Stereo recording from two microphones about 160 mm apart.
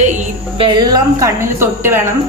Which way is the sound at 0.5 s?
30° right (ahead or behind).